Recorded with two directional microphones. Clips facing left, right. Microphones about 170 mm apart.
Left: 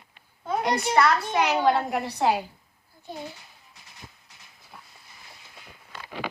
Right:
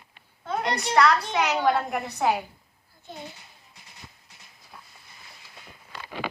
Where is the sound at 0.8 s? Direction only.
5° left (ahead or behind).